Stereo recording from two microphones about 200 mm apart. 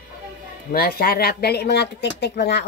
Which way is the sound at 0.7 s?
50° left (ahead or behind).